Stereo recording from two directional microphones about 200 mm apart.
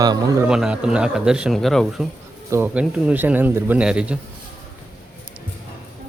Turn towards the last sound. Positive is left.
turn(degrees=-5)  # may be behind; listen again after turning